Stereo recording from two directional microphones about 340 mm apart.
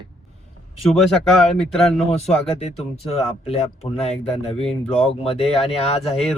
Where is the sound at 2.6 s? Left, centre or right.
Centre.